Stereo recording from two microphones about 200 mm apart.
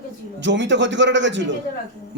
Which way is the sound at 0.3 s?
60° right (ahead or behind).